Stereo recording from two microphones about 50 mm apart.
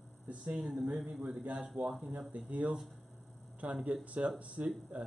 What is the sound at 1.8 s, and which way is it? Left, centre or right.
Speech, right.